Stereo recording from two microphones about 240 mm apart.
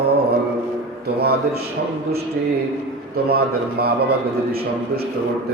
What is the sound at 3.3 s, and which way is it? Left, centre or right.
A man's voice, right.